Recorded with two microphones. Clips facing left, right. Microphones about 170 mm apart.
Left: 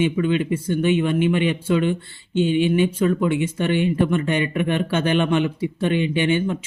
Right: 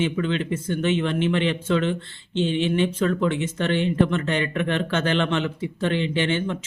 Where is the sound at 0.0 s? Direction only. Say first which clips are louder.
Left 4 dB; 10° left (ahead or behind).